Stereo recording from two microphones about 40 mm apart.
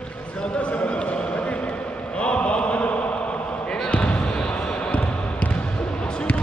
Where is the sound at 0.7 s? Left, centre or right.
Left.